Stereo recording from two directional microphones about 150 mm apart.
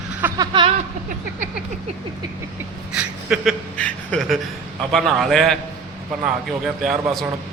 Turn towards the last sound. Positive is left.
turn(degrees=0)  # may be behind; listen again after turning